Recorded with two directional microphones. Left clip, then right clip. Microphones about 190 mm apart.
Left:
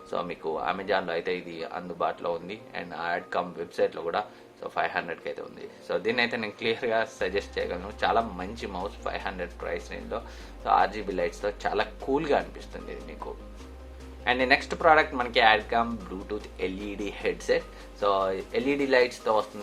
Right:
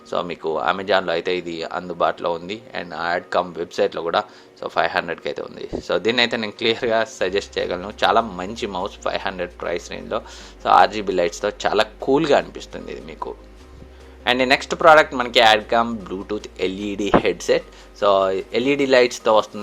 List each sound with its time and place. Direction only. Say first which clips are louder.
0.1 s speech: right 8 dB; 30° right (ahead or behind)
14.3 s speech: right 6 dB; 30° right (ahead or behind)